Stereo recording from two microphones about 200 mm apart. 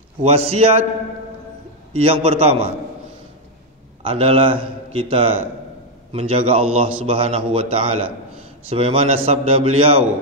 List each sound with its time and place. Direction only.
0.2 s a man's voice: 30° right (ahead or behind)
2.0 s a man's voice: 30° right (ahead or behind)
4.0 s a man's voice: 30° right (ahead or behind)